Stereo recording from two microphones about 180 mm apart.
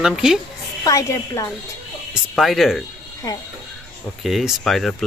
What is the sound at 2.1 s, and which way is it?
Speech, centre (ahead or behind).